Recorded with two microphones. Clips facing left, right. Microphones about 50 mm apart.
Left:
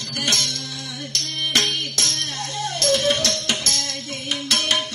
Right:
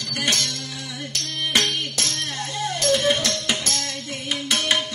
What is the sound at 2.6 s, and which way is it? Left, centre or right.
Music, centre.